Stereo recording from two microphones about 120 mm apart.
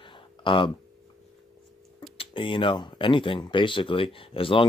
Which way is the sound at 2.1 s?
45° left (ahead or behind).